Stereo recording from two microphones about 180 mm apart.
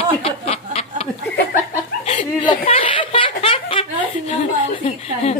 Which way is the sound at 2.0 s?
35° left (ahead or behind).